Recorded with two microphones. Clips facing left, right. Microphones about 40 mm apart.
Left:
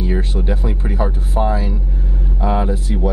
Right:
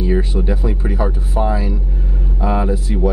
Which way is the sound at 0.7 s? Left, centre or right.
Centre.